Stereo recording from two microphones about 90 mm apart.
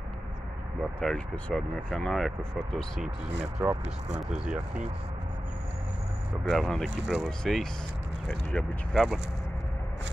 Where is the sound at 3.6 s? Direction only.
15° right (ahead or behind).